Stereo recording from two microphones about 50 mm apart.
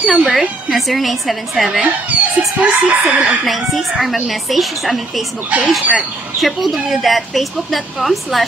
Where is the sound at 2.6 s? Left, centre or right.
Right.